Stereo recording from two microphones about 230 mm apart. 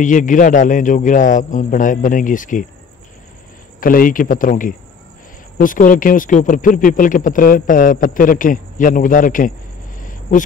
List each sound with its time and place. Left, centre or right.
0.0 s speech: left
3.8 s speech: left
9.9 s a sound: left